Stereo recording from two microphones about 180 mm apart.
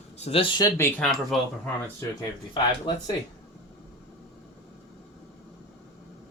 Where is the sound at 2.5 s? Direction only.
25° left (ahead or behind).